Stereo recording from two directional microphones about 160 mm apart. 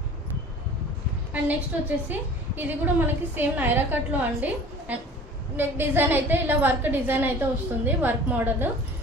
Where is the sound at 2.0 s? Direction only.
10° right (ahead or behind).